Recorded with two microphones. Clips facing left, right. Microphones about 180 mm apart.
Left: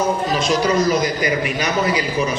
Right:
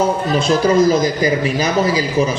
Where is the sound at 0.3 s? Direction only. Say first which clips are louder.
Right 6 dB; 30° right (ahead or behind).